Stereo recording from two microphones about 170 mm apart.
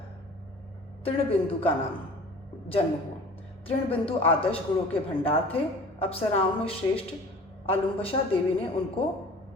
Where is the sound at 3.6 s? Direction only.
35° left (ahead or behind).